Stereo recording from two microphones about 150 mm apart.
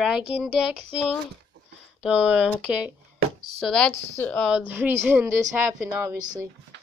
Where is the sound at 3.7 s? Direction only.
10° left (ahead or behind).